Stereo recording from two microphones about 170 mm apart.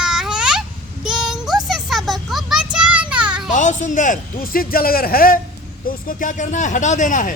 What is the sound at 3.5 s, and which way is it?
A man's voice, 45° left (ahead or behind).